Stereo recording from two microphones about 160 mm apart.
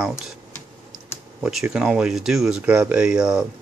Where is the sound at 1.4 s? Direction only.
5° right (ahead or behind).